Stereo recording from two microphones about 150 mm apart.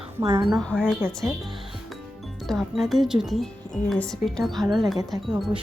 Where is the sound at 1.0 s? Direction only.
15° right (ahead or behind).